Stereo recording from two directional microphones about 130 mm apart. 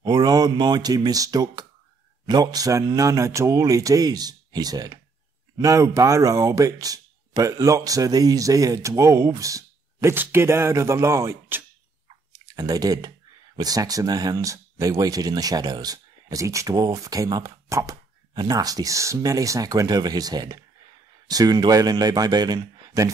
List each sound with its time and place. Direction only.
0.0 s speech: 30° right (ahead or behind)